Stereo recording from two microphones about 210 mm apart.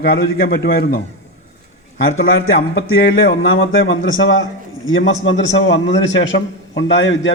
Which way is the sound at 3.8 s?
65° left (ahead or behind).